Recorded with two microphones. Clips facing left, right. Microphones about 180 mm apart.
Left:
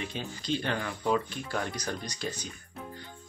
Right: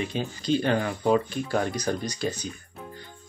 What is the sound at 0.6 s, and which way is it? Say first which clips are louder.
Speech: right 6 dB; 40° right (ahead or behind).